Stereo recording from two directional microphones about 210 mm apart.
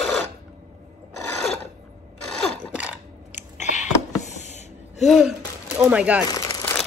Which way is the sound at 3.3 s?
35° left (ahead or behind).